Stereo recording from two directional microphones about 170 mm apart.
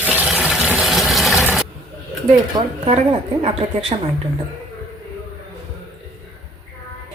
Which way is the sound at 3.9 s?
40° right (ahead or behind).